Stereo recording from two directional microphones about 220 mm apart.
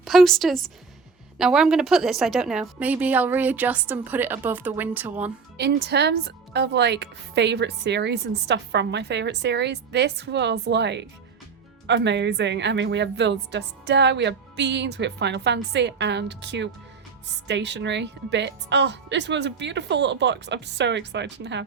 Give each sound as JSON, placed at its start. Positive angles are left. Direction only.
{"t": 0.0, "sound": "a woman's voice", "side_deg": 0}
{"t": 5.5, "sound": "speech", "side_deg": -50}